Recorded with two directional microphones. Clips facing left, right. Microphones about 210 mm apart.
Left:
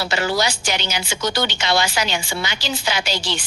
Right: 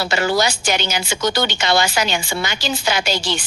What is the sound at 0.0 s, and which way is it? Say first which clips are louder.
A woman's voice: right 3 dB; 50° right (ahead or behind).